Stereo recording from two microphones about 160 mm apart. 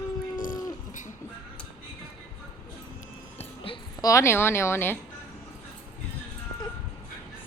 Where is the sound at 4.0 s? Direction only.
20° left (ahead or behind).